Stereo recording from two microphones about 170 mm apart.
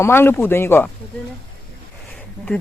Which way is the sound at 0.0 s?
15° left (ahead or behind).